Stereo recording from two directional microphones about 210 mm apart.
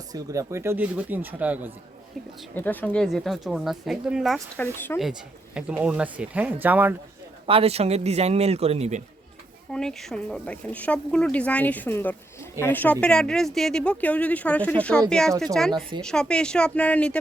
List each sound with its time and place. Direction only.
0.1 s speech: 15° right (ahead or behind)
2.6 s speech: 5° left (ahead or behind)
4.5 s speech: 10° left (ahead or behind)
5.5 s speech: 5° right (ahead or behind)
7.4 s a man's voice: 25° right (ahead or behind)
9.7 s speech: centre (ahead or behind)